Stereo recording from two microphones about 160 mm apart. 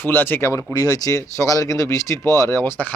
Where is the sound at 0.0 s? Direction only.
10° left (ahead or behind).